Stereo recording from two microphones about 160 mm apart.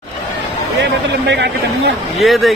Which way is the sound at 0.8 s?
90° right.